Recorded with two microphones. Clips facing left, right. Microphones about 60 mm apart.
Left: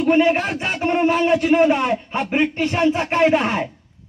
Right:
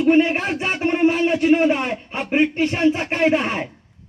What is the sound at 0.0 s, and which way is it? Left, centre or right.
Music, centre.